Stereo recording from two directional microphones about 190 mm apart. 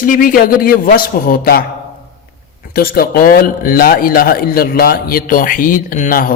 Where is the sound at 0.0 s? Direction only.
45° left (ahead or behind).